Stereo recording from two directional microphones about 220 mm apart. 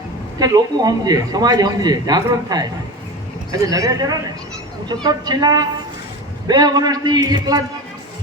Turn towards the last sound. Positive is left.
turn(degrees=-20)  # may be behind; listen again after turning